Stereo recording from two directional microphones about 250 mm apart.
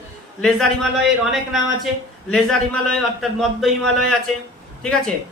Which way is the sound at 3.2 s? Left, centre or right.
Centre.